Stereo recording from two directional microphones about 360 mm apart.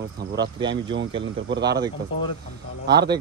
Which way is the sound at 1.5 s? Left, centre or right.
Right.